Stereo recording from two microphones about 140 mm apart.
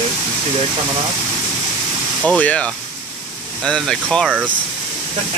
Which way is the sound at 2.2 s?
10° left (ahead or behind).